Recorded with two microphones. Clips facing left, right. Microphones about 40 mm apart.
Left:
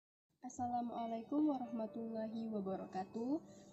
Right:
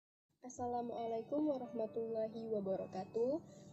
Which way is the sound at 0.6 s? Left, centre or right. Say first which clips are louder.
Even; left.